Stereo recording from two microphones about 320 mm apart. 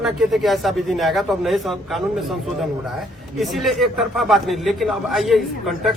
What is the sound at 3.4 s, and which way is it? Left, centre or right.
A man's voice, centre.